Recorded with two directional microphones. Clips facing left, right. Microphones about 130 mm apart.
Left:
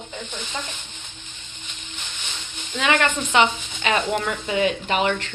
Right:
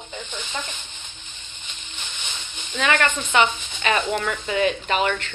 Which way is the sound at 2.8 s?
20° left (ahead or behind).